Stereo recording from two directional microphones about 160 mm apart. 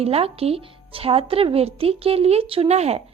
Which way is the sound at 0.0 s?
40° right (ahead or behind).